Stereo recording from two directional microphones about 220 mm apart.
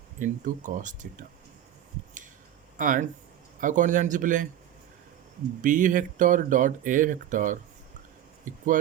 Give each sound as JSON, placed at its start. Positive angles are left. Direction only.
{"t": 0.2, "sound": "speech", "side_deg": -35}
{"t": 2.7, "sound": "speech", "side_deg": -35}
{"t": 5.6, "sound": "speech", "side_deg": -35}
{"t": 8.5, "sound": "a sound", "side_deg": -35}